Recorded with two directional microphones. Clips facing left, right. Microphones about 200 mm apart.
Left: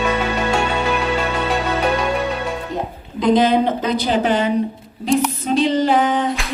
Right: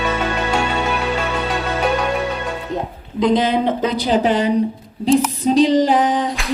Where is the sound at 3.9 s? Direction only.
30° right (ahead or behind).